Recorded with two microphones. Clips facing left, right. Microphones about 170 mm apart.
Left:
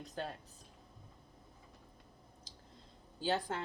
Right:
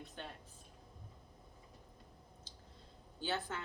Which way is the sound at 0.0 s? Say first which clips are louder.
Left 7 dB; 40° left (ahead or behind).